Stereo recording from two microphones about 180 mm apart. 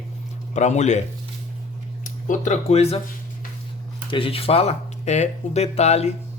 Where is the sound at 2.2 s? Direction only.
45° left (ahead or behind).